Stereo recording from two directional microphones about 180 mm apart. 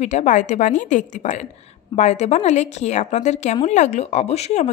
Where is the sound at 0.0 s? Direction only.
40° left (ahead or behind).